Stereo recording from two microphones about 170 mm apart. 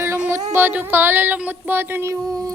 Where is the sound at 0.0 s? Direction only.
15° right (ahead or behind).